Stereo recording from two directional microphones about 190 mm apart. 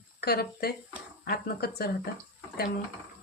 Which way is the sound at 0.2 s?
55° left (ahead or behind).